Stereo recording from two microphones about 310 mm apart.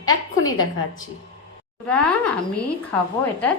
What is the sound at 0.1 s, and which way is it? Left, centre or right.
Speech, left.